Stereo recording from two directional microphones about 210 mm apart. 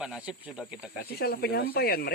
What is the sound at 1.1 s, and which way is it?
Speech, 45° left (ahead or behind).